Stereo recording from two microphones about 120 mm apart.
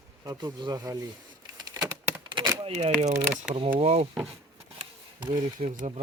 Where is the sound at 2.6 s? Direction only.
60° right (ahead or behind).